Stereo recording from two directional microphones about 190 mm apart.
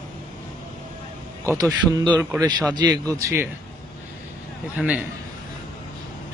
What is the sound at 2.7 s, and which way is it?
Speech, 20° right (ahead or behind).